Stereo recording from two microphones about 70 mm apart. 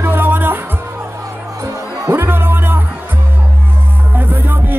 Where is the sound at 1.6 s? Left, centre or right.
Right.